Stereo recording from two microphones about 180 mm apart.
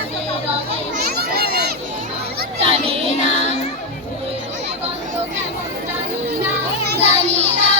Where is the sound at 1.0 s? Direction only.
60° right (ahead or behind).